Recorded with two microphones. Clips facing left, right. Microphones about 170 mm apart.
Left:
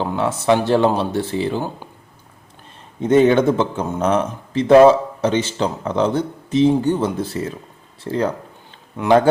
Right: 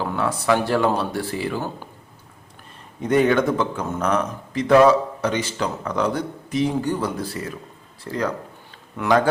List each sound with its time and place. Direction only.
0.0 s speech: 25° left (ahead or behind)
3.0 s speech: 25° left (ahead or behind)